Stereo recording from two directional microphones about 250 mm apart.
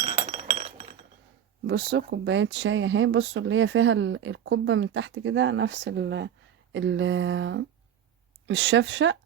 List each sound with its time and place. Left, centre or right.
0.0 s glass: right
1.6 s speech: right